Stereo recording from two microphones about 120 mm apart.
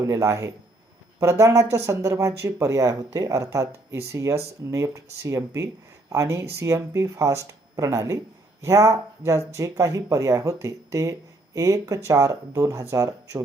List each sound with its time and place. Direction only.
0.0 s speech: 25° right (ahead or behind)